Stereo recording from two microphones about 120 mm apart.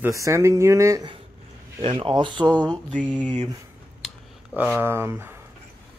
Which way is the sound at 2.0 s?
45° right (ahead or behind).